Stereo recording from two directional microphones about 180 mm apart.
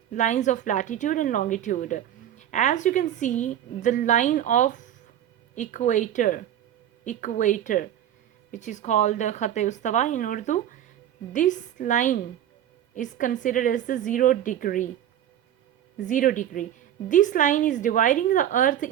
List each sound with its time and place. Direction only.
0.1 s a woman's voice: 40° left (ahead or behind)
16.0 s a woman's voice: 45° left (ahead or behind)